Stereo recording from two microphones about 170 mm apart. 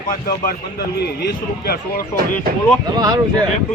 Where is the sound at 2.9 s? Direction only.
25° right (ahead or behind).